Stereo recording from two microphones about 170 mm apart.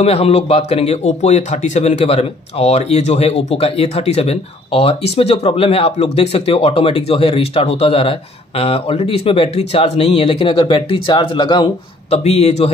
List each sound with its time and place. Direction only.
0.0 s speech: 35° left (ahead or behind)